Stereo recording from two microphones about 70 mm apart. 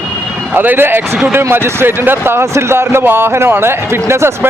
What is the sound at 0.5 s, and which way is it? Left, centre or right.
A man's voice, right.